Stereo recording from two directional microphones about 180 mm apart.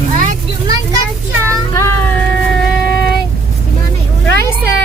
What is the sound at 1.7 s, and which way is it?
Music, 15° left (ahead or behind).